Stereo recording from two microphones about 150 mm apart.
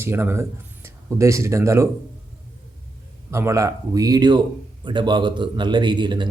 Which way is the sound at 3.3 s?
20° right (ahead or behind).